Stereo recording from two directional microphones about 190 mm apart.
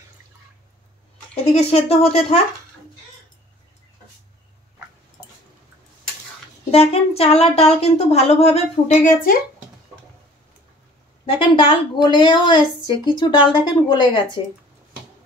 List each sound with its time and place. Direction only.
1.3 s speech: 30° left (ahead or behind)
6.7 s speech: 30° left (ahead or behind); by 9.4 s 45° left (ahead or behind)
11.2 s a woman's voice: 25° left (ahead or behind)